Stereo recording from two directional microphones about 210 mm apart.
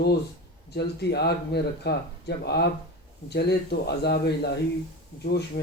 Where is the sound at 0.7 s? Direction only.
50° left (ahead or behind).